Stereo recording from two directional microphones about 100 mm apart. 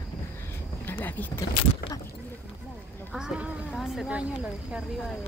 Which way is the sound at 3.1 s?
10° right (ahead or behind).